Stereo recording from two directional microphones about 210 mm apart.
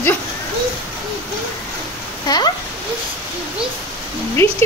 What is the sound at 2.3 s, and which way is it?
Speech, 20° left (ahead or behind).